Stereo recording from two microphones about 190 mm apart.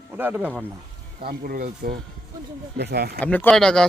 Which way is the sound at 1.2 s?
55° right (ahead or behind).